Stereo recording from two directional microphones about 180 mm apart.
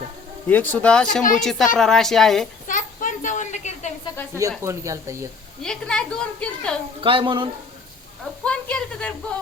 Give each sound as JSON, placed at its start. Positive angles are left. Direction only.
{"t": 0.4, "sound": "a woman's voice", "side_deg": 10}
{"t": 2.6, "sound": "a sound", "side_deg": 45}
{"t": 4.4, "sound": "speech", "side_deg": -15}
{"t": 5.6, "sound": "a woman's voice", "side_deg": 5}
{"t": 7.0, "sound": "speech", "side_deg": -30}
{"t": 8.4, "sound": "a woman's voice", "side_deg": 5}